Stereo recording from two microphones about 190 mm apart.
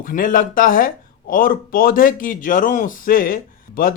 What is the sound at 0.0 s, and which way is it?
A man's voice, 45° left (ahead or behind).